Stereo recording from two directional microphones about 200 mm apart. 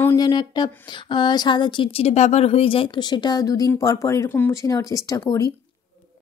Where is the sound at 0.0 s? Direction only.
20° left (ahead or behind).